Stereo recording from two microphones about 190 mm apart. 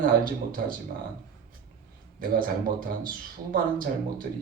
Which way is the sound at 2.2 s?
50° right (ahead or behind).